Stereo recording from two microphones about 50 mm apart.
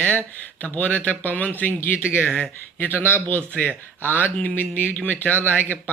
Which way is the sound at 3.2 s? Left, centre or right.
Left.